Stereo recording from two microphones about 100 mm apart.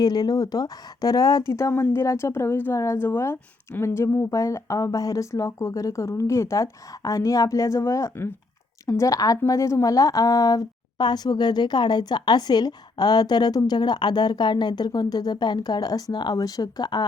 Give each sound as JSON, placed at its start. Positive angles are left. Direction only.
{"t": 0.0, "sound": "a woman's voice", "side_deg": 40}